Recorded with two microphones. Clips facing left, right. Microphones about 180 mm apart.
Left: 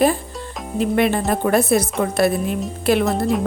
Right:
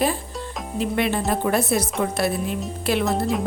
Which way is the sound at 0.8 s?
50° left (ahead or behind).